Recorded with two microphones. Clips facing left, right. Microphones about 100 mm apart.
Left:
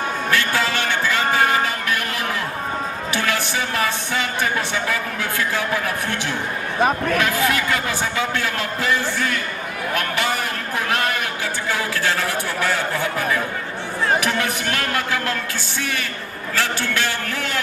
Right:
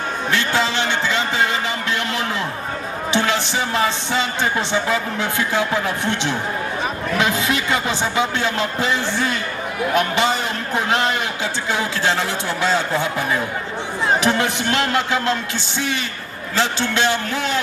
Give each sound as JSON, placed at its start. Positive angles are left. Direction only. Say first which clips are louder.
{"t": 0.3, "sound": "music", "louder": "right 2 dB", "side_deg": -20}
{"t": 3.1, "sound": "speech", "louder": "right 4 dB", "side_deg": -25}
{"t": 16.6, "sound": "speech", "louder": "right 3 dB", "side_deg": -20}